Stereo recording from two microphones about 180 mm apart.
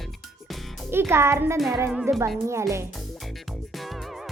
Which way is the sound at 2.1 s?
15° right (ahead or behind).